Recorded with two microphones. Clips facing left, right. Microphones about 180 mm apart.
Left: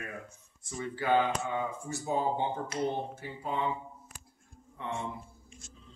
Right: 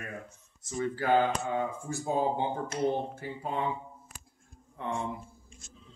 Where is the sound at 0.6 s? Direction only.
45° right (ahead or behind).